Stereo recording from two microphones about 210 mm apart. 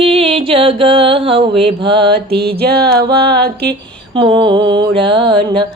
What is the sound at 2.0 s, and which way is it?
Music, 50° right (ahead or behind).